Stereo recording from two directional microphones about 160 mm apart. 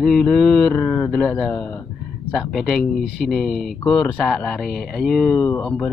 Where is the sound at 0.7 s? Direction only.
15° left (ahead or behind).